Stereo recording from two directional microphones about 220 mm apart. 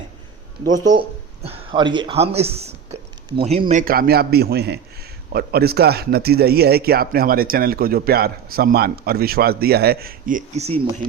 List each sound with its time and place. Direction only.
0.9 s speech: 25° right (ahead or behind)